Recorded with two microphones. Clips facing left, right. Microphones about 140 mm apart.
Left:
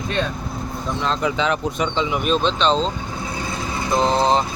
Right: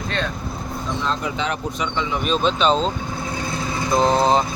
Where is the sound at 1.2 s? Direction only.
90° left.